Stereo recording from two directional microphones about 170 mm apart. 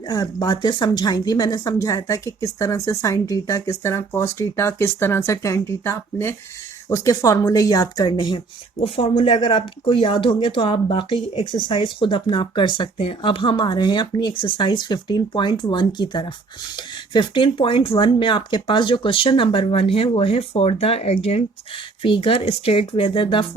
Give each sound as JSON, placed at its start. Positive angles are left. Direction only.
{"t": 0.1, "sound": "speech", "side_deg": 20}